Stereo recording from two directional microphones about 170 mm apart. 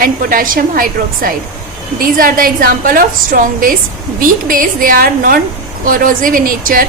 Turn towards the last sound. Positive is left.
turn(degrees=-55)  # may be behind; listen again after turning